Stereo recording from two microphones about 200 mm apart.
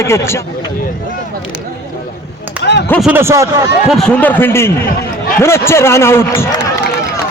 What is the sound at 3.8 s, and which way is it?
A man's voice, centre (ahead or behind).